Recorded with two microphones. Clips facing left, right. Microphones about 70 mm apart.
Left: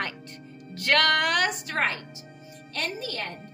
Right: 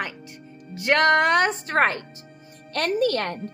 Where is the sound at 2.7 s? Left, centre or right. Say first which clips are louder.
Right 10 dB; right.